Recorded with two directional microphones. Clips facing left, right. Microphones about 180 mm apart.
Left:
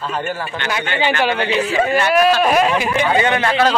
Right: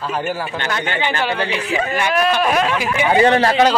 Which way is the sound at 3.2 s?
35° right (ahead or behind).